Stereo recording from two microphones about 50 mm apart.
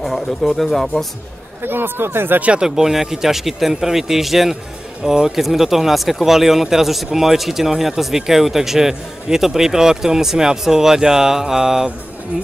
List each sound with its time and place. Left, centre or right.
0.0 s speech: centre
1.6 s speech: right
2.6 s speech: centre